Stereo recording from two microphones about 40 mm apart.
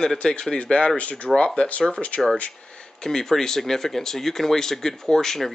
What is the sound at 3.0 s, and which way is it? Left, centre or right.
Speech, centre.